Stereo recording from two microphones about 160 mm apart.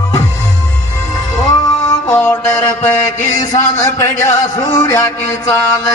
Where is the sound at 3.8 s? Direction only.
15° left (ahead or behind).